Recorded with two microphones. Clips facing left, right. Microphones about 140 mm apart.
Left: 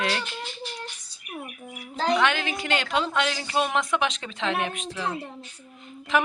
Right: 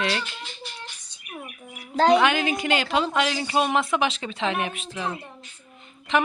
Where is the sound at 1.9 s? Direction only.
70° right (ahead or behind).